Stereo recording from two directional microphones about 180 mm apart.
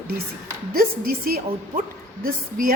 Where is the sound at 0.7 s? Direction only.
55° right (ahead or behind).